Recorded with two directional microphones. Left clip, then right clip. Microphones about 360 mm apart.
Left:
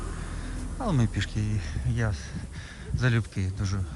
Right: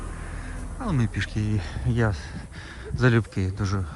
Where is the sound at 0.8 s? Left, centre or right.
Centre.